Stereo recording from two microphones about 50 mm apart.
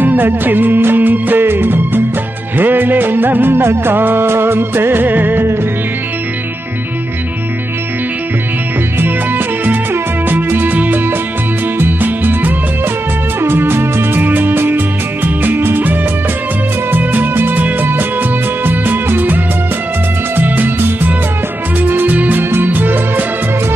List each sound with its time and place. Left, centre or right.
0.0 s music: right
9.0 s music: right
13.4 s music: right
22.4 s music: right